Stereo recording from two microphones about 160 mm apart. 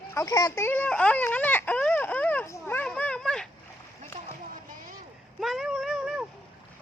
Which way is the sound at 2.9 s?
5° left (ahead or behind).